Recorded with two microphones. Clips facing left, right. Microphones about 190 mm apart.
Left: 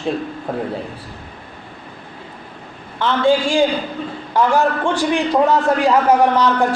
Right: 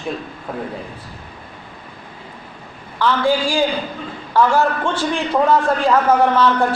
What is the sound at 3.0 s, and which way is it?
A man's voice, 25° left (ahead or behind).